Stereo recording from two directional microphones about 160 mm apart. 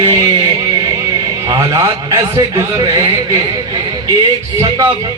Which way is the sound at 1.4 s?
20° right (ahead or behind).